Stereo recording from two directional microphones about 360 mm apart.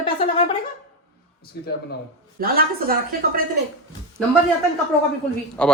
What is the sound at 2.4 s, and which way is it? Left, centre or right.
A woman's voice, right.